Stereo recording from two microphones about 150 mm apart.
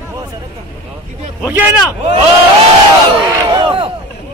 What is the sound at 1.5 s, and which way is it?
Speech, 15° right (ahead or behind).